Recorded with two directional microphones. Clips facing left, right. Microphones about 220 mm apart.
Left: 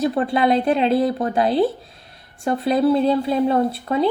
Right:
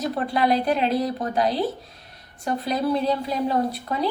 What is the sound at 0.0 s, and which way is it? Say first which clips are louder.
A woman's voice: left 5 dB; 25° left (ahead or behind).